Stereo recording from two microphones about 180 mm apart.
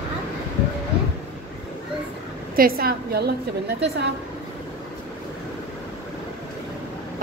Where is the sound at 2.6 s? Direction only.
55° right (ahead or behind).